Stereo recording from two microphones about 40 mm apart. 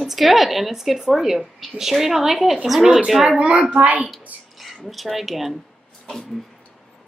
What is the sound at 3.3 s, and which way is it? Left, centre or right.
Speech, right.